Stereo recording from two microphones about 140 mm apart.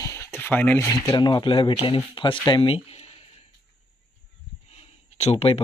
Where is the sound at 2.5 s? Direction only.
40° left (ahead or behind).